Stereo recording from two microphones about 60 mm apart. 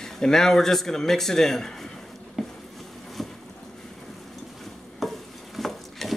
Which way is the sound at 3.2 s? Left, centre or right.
Centre.